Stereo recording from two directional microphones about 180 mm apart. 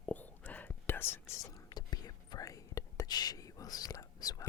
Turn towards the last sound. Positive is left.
turn(degrees=20)  # may be behind; listen again after turning